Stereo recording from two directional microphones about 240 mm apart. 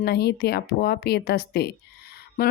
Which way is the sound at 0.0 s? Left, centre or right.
Left.